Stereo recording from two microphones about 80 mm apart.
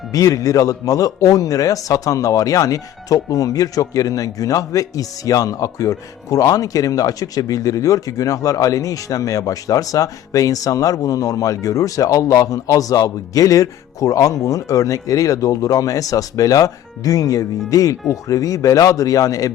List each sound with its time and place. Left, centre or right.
0.1 s a man's voice: left